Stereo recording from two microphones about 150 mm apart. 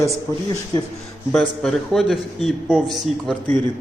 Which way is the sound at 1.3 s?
Centre (ahead or behind).